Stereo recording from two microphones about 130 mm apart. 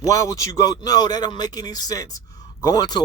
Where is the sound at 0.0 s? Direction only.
25° left (ahead or behind).